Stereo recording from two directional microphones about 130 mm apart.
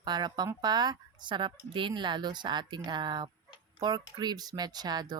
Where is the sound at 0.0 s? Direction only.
35° right (ahead or behind).